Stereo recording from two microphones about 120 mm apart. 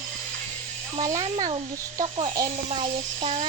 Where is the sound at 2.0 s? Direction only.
50° right (ahead or behind).